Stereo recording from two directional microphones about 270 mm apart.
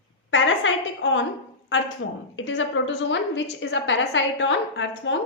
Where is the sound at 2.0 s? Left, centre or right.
Left.